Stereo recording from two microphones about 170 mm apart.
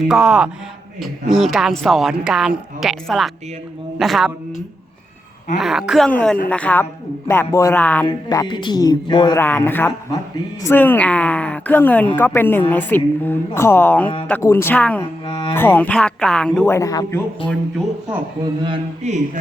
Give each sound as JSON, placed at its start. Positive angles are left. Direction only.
{"t": 0.1, "sound": "a woman's voice", "side_deg": -5}
{"t": 5.5, "sound": "a woman's voice", "side_deg": -5}
{"t": 6.1, "sound": "speech", "side_deg": 10}
{"t": 8.0, "sound": "speech", "side_deg": 25}
{"t": 9.4, "sound": "speech", "side_deg": 10}
{"t": 15.3, "sound": "speech", "side_deg": 25}
{"t": 15.5, "sound": "speech", "side_deg": 10}
{"t": 16.6, "sound": "speech", "side_deg": 15}
{"t": 19.0, "sound": "a sound", "side_deg": -45}